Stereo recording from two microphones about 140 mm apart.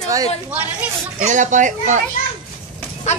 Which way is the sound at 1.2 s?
60° right (ahead or behind).